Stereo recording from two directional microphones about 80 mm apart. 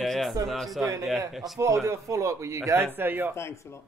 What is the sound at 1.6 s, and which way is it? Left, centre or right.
Speech, right.